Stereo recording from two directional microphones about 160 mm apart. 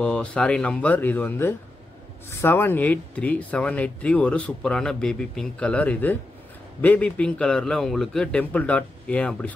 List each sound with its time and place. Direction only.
0.0 s speech: 5° left (ahead or behind)